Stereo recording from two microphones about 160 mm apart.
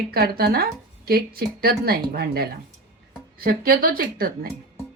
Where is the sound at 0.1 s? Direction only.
75° right (ahead or behind).